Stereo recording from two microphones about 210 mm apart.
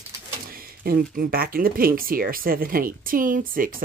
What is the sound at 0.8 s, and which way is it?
Speech, 45° right (ahead or behind).